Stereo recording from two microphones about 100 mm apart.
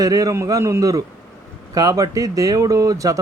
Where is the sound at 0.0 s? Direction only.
35° right (ahead or behind).